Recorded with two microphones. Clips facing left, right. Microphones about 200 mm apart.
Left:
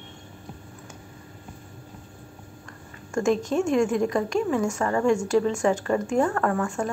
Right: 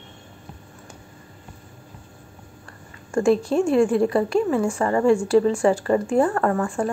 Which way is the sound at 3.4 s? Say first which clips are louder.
Right 4 dB; 35° right (ahead or behind).